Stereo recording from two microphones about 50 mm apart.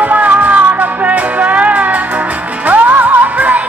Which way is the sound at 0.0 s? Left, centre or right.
Right.